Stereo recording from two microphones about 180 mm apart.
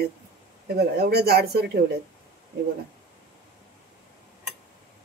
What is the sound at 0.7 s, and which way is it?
Speech, 60° right (ahead or behind).